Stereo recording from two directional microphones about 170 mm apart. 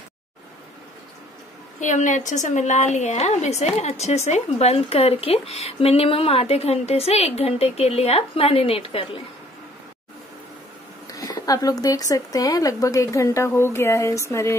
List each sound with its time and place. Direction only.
1.8 s a woman's voice: 45° left (ahead or behind)
11.1 s speech: 20° left (ahead or behind)